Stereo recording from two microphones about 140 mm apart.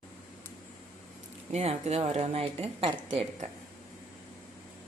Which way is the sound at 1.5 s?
50° right (ahead or behind).